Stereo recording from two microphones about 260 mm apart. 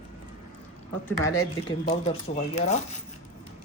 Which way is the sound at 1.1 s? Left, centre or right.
Centre.